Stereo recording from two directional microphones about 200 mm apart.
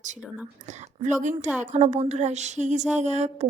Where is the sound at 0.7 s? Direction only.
35° right (ahead or behind).